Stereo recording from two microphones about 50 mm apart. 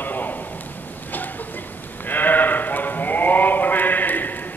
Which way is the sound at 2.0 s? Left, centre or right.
Left.